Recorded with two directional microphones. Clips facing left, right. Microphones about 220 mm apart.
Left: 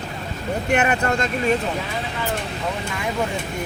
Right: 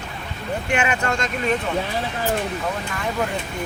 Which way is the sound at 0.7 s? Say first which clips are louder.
Left 3 dB; 40° left (ahead or behind).